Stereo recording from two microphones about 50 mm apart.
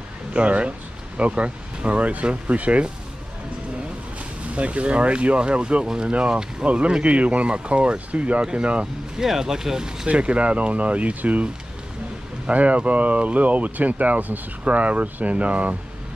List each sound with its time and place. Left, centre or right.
0.3 s speech: right
4.6 s speech: right
9.2 s speech: centre
10.0 s speech: right
12.4 s speech: right